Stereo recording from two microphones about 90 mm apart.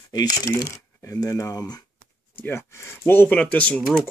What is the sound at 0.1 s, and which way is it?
Speech, 45° left (ahead or behind).